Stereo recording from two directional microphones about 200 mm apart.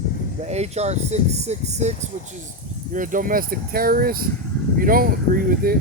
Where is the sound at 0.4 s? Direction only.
35° right (ahead or behind).